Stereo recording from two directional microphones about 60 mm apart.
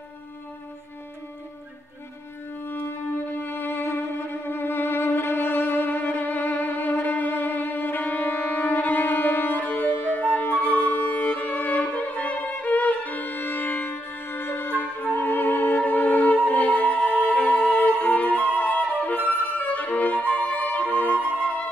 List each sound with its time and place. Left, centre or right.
3.3 s music: left